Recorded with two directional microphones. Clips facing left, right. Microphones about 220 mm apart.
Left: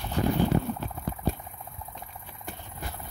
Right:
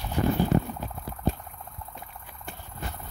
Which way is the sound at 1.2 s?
10° left (ahead or behind).